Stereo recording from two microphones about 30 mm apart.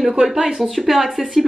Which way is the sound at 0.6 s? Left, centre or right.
Centre.